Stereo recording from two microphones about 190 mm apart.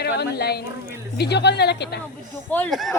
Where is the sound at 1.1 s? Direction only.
60° left (ahead or behind).